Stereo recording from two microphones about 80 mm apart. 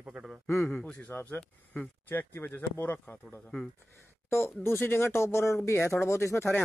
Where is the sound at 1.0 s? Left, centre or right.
Left.